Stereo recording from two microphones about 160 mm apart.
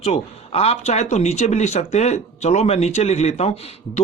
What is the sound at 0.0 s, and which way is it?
Speech, 40° left (ahead or behind).